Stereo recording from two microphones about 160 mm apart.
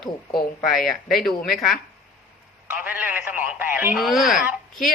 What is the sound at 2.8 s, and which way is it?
A man's voice, 10° right (ahead or behind).